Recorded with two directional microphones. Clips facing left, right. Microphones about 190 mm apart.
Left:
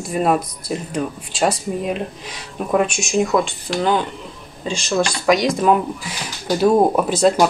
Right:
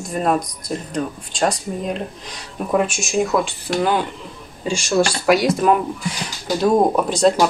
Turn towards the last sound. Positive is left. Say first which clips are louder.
# left 1 dB
turn(degrees=5)  # may be behind; listen again after turning